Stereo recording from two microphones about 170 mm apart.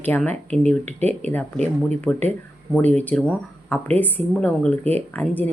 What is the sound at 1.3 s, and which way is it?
Speech, 10° left (ahead or behind).